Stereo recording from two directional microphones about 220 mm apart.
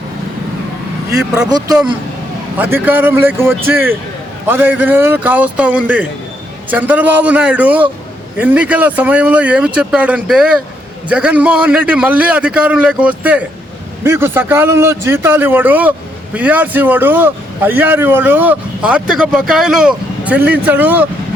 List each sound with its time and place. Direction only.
1.2 s a man's voice: 5° right (ahead or behind)
1.5 s a man's voice: 20° right (ahead or behind)